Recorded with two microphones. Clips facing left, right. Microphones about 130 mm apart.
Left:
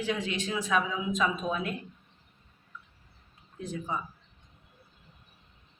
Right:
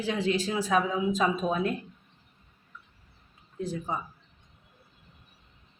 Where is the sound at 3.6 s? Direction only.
35° right (ahead or behind).